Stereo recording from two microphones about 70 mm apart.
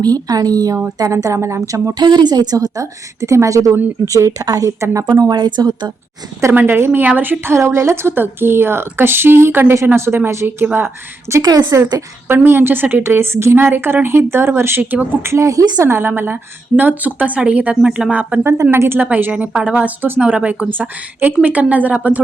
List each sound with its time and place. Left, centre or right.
0.0 s a woman's voice: right
2.0 s a woman's voice: right
5.3 s a woman's voice: right
6.5 s a woman's voice: right
7.5 s a woman's voice: right
11.4 s a woman's voice: right
12.3 s a woman's voice: right
15.2 s a woman's voice: right
15.8 s a woman's voice: right
18.4 s a woman's voice: right
18.9 s a woman's voice: centre